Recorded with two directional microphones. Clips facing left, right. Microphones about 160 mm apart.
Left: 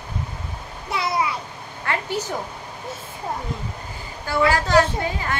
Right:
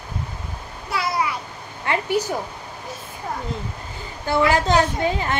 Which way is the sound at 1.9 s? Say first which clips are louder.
Right 4 dB; 15° right (ahead or behind).